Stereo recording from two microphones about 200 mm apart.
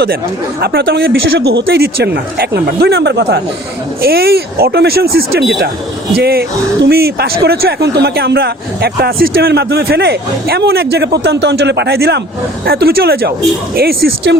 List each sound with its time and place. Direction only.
0.6 s speech: 55° right (ahead or behind)